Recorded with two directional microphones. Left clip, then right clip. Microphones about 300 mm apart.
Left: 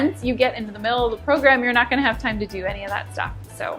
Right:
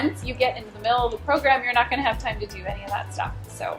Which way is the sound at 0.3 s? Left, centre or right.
Left.